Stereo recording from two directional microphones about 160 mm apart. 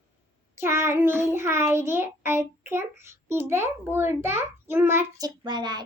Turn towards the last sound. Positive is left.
turn(degrees=-25)  # may be behind; listen again after turning